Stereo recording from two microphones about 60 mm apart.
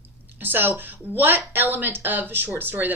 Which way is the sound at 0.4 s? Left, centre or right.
Right.